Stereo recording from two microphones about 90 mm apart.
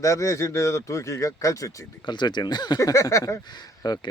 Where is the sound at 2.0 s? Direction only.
55° left (ahead or behind).